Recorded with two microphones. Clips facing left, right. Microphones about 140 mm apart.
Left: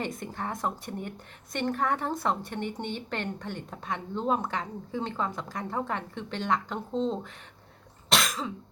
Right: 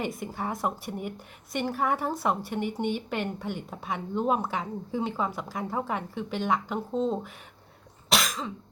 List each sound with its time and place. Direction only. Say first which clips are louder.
0.0 s speech: right 2 dB; 5° right (ahead or behind)
8.1 s cough: even; centre (ahead or behind)